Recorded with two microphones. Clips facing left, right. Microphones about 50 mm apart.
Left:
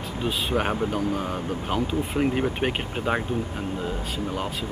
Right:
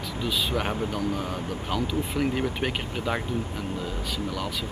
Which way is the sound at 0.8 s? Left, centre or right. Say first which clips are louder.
Left 3 dB; left.